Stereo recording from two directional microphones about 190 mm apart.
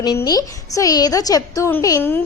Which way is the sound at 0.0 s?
20° left (ahead or behind).